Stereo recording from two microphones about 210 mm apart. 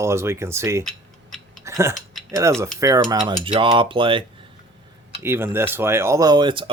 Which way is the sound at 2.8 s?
15° right (ahead or behind).